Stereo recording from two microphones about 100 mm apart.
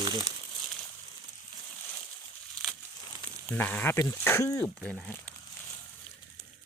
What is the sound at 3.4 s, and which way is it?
Speech, 15° left (ahead or behind).